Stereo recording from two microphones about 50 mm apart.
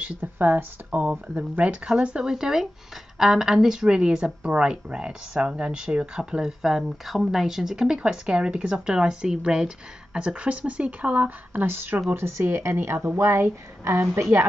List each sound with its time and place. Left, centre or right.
0.0 s speech: right
1.9 s speech: centre; by 11.6 s right
11.6 s a woman's voice: right
12.1 s a woman's voice: right